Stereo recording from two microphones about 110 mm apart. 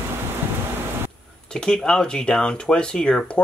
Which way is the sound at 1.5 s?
5° left (ahead or behind).